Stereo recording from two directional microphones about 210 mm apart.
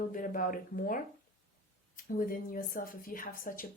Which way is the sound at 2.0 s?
40° left (ahead or behind).